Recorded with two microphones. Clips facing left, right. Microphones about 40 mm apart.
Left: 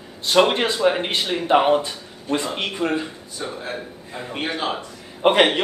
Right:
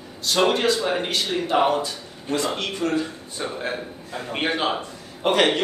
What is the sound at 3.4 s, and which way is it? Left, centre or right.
Speech, centre.